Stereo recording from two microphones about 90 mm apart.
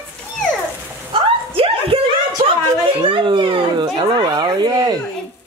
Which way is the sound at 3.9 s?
50° right (ahead or behind).